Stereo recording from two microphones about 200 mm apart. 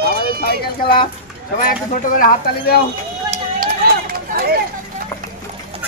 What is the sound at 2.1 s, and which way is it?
Speech, 45° left (ahead or behind).